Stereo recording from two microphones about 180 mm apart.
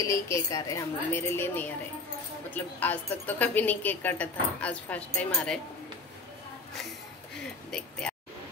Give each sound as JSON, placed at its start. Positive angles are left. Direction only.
{"t": 0.0, "sound": "a woman's voice", "side_deg": 15}
{"t": 7.7, "sound": "speech", "side_deg": 5}